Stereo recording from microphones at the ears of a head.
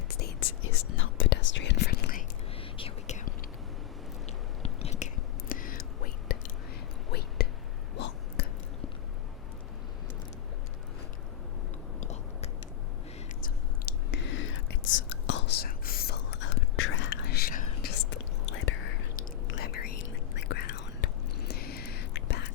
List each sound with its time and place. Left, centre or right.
0.1 s whispering: left
4.6 s chewing: left
5.5 s whispering: left
13.4 s whispering: left